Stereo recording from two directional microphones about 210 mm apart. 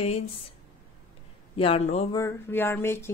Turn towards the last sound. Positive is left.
turn(degrees=10)  # may be behind; listen again after turning